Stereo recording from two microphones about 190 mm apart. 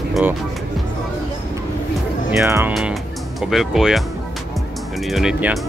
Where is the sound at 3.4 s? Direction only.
Centre (ahead or behind).